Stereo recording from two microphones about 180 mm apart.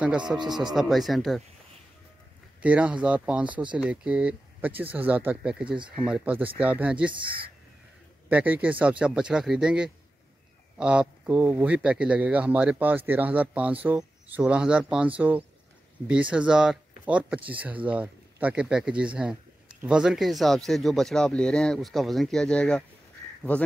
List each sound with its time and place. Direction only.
0.3 s speech: centre (ahead or behind)
2.6 s speech: 5° right (ahead or behind)
7.2 s speech: 30° right (ahead or behind)
8.3 s speech: 10° right (ahead or behind); by 23.7 s 10° left (ahead or behind)